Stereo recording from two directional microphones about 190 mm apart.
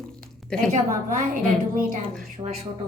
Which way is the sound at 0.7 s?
45° right (ahead or behind).